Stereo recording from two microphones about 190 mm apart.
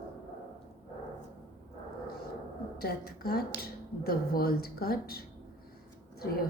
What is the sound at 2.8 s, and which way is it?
A woman's voice, 55° left (ahead or behind).